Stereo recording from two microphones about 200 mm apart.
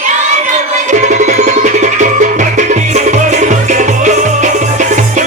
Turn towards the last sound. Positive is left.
turn(degrees=-40)  # may be behind; listen again after turning